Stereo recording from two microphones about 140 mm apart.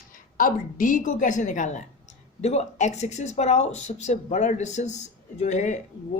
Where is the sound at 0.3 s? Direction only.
75° left (ahead or behind); by 5.8 s 60° left (ahead or behind).